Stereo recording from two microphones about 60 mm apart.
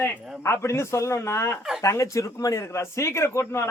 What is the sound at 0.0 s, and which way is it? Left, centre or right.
Speech, left.